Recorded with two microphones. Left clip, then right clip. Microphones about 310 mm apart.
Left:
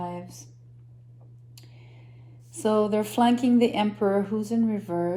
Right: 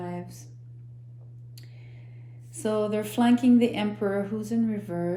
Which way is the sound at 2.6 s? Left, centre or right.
Centre.